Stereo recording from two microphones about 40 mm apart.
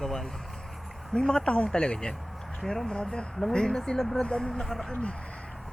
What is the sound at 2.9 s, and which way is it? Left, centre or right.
Speech, left.